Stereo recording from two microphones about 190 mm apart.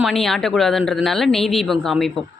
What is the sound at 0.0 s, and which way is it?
Speech, centre (ahead or behind).